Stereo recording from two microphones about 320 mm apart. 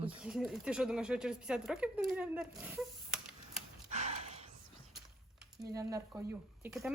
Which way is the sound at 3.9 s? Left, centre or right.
Right.